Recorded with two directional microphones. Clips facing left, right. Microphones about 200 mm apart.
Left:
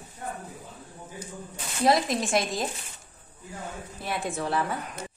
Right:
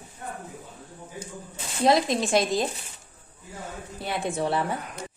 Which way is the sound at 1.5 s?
25° right (ahead or behind).